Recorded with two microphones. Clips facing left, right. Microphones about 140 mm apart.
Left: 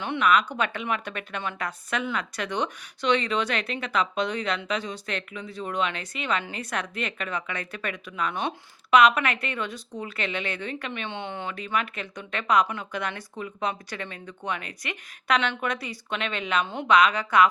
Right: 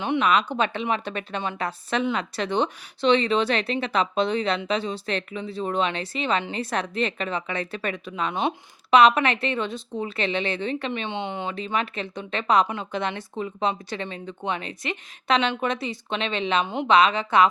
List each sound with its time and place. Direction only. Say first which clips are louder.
0.0 s a woman's voice: right 1 dB; 20° right (ahead or behind)